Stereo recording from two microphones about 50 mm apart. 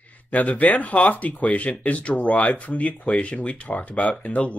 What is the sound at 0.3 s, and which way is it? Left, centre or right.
Speech, left.